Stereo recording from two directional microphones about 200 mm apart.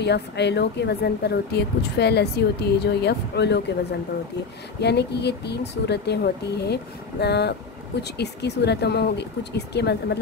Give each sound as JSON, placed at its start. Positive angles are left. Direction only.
{"t": 0.0, "sound": "speech", "side_deg": 60}
{"t": 4.8, "sound": "speech", "side_deg": 55}